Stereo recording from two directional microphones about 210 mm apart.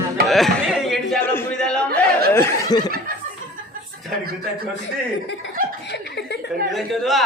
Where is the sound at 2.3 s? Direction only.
15° left (ahead or behind).